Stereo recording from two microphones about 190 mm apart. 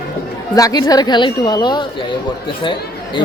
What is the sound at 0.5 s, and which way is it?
A woman's voice, 20° left (ahead or behind).